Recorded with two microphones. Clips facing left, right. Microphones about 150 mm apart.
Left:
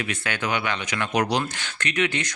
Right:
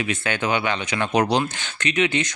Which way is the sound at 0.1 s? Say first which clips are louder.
Right 4 dB; 25° right (ahead or behind).